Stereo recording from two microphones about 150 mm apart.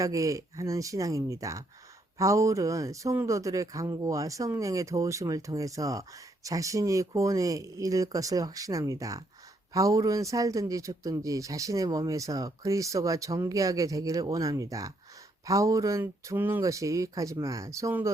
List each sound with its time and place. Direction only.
0.0 s speech: 20° right (ahead or behind)